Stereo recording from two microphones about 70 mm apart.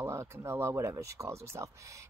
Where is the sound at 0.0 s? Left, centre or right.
Right.